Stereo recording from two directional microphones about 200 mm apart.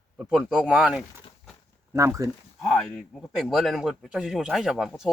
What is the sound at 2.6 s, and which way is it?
A man's voice, centre (ahead or behind).